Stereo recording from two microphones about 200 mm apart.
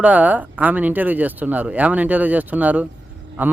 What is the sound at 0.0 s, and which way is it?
A man's voice, 5° right (ahead or behind).